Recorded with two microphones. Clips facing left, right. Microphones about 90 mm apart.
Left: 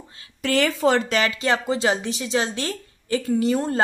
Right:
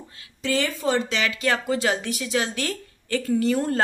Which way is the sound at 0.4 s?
65° left (ahead or behind).